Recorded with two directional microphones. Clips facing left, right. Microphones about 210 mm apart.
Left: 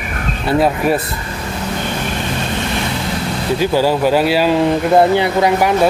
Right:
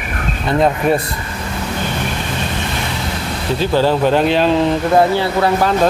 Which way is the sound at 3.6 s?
10° left (ahead or behind).